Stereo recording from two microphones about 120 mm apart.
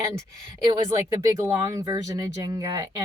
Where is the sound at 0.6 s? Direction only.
30° right (ahead or behind).